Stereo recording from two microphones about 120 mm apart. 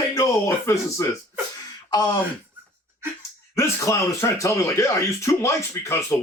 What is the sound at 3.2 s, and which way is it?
Speech, 25° left (ahead or behind).